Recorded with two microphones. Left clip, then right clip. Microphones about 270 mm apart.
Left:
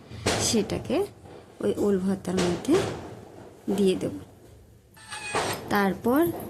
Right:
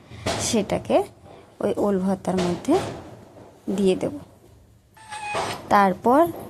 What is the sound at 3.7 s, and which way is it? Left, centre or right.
Speech, centre.